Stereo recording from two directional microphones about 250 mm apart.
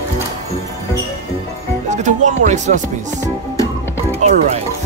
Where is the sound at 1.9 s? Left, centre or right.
Right.